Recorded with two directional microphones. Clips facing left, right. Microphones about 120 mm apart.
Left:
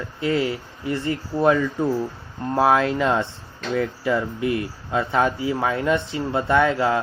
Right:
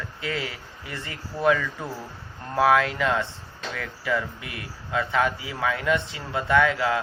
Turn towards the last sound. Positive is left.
turn(degrees=35)  # may be behind; listen again after turning